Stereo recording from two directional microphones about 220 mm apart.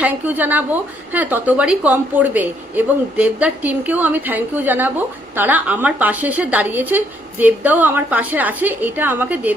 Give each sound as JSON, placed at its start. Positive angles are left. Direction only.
{"t": 0.0, "sound": "a woman's voice", "side_deg": -5}